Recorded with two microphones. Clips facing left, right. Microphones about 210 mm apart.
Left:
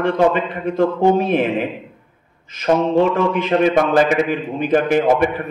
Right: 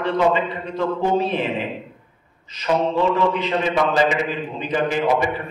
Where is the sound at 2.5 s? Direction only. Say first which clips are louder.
Left 5 dB; 50° left (ahead or behind).